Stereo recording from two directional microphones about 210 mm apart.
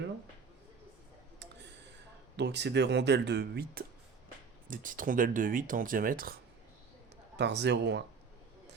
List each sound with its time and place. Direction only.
2.3 s speech: 55° right (ahead or behind)
7.3 s a man's voice: 55° right (ahead or behind)